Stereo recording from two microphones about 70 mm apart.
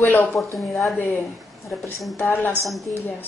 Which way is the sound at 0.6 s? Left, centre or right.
Centre.